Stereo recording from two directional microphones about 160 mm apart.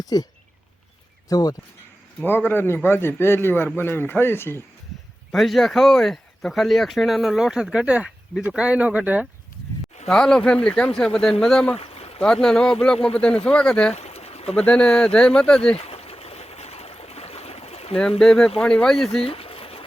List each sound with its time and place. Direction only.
0.0 s speech: 25° left (ahead or behind)
1.3 s a man's voice: 25° left (ahead or behind)
5.3 s speech: centre (ahead or behind)
10.1 s speech: 5° left (ahead or behind)
11.8 s a sound: 40° left (ahead or behind)
12.2 s a man's voice: 5° left (ahead or behind)
13.9 s a sound: 40° left (ahead or behind)
14.5 s speech: 5° left (ahead or behind)
15.7 s boat: 40° left (ahead or behind)
18.2 s speech: 5° left (ahead or behind)
19.2 s pigeon: 35° left (ahead or behind)